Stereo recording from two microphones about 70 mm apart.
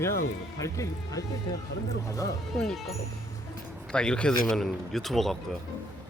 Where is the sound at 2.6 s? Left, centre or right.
Centre.